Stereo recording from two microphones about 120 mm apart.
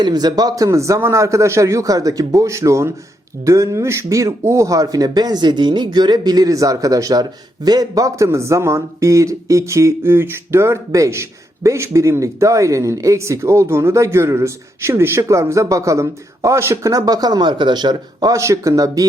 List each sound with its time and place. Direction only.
0.0 s speech: 35° right (ahead or behind)